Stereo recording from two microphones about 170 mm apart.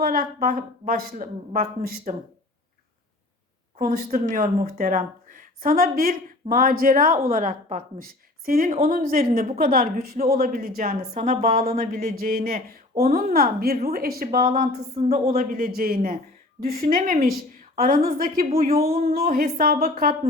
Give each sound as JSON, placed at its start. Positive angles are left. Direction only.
{"t": 0.0, "sound": "a woman's voice", "side_deg": -60}
{"t": 3.8, "sound": "a woman's voice", "side_deg": -60}